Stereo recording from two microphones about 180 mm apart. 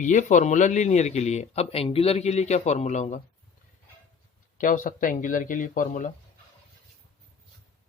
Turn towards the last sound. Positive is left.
turn(degrees=45)  # may be behind; listen again after turning